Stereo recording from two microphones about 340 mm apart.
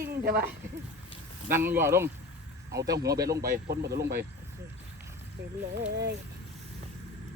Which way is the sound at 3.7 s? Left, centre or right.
Right.